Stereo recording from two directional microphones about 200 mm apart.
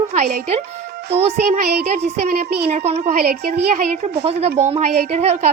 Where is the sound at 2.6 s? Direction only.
30° right (ahead or behind).